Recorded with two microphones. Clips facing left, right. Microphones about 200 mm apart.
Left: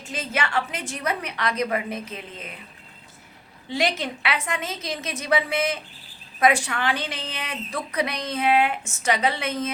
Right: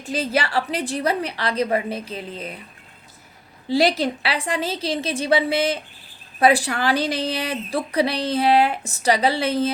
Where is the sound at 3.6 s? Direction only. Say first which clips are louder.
Right 7 dB; 35° right (ahead or behind).